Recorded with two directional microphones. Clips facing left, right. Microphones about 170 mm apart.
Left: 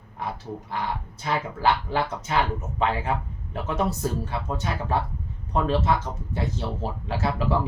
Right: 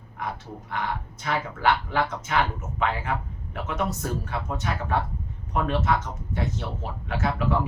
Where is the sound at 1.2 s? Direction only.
30° left (ahead or behind).